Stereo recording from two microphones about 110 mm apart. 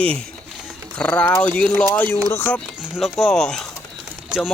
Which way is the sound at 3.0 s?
Centre (ahead or behind).